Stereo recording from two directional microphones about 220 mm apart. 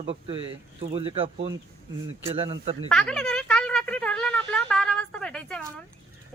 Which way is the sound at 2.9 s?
5° left (ahead or behind).